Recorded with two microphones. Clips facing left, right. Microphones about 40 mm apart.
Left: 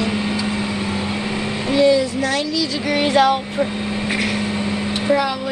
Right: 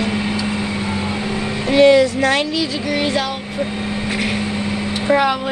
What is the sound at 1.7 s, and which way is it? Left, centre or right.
Speech, right.